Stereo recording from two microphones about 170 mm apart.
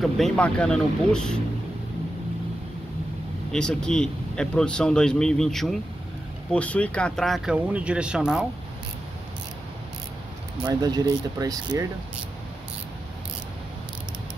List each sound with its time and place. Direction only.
0.0 s speech: 5° left (ahead or behind)
3.5 s speech: 5° left (ahead or behind)
10.6 s speech: 25° right (ahead or behind)